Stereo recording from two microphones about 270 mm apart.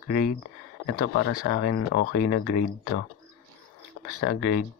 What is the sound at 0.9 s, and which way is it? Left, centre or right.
Speech, left.